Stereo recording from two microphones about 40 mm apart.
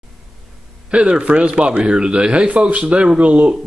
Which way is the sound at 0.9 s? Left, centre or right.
Right.